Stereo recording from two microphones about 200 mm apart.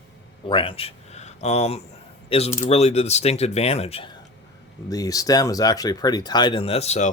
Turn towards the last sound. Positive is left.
turn(degrees=35)  # may be behind; listen again after turning